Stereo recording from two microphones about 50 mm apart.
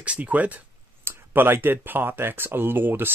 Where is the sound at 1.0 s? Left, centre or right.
Right.